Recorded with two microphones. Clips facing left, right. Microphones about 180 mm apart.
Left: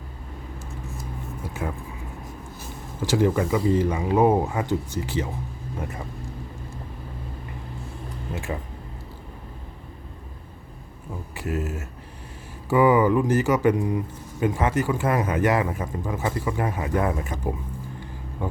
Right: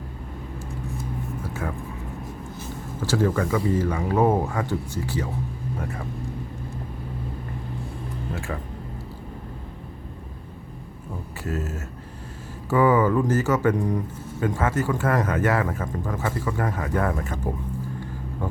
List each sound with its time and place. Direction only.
1.6 s speech: 10° left (ahead or behind)
3.0 s speech: 15° left (ahead or behind)
11.3 s speech: 15° left (ahead or behind)